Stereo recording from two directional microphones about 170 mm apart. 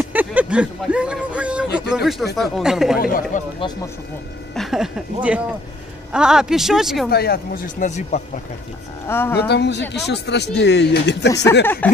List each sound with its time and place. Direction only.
0.0 s a sound: 10° right (ahead or behind)
2.0 s speech: centre (ahead or behind)
3.0 s speech: 55° left (ahead or behind)
3.5 s speech: 25° left (ahead or behind)
4.6 s speech: centre (ahead or behind)
7.1 s speech: 65° left (ahead or behind); by 8.2 s 45° left (ahead or behind)
9.0 s speech: 15° left (ahead or behind)
9.5 s speech: 85° left
11.6 s speech: 10° left (ahead or behind)